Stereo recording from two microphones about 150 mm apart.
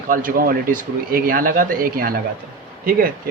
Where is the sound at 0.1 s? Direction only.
70° right (ahead or behind).